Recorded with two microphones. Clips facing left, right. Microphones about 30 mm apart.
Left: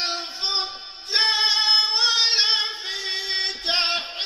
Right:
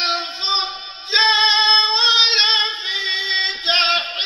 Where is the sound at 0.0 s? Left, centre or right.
Right.